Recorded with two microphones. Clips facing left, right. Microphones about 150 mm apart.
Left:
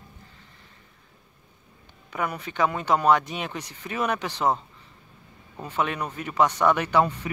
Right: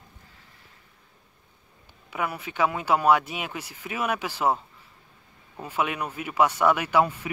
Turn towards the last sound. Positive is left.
turn(degrees=-10)  # may be behind; listen again after turning